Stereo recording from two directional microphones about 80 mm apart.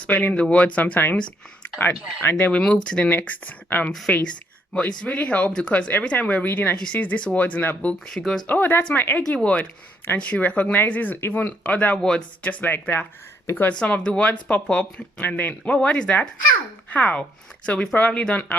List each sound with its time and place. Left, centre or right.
0.0 s speech: centre
2.3 s speech: centre
8.0 s speech: centre
8.4 s speech: left; by 12.5 s centre
12.5 s speech: left
13.7 s speech: centre